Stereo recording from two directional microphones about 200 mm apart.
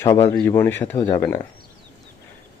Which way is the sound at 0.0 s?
15° left (ahead or behind).